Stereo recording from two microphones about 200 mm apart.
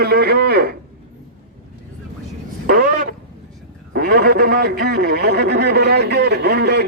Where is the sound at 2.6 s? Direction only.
45° right (ahead or behind).